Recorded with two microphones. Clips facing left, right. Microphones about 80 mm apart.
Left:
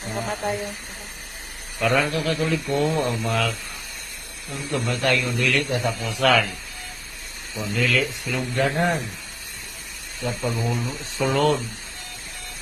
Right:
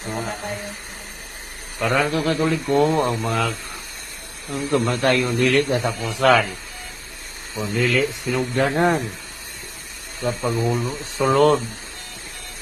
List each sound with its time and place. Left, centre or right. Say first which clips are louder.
1.8 s a man's voice: right 1 dB; right
2.0 s speech: right 3 dB; right
4.5 s speech: right 6 dB; right
5.7 s a man's voice: right 2 dB; right
7.5 s speech: right 3 dB; right
10.2 s speech: right 4 dB; right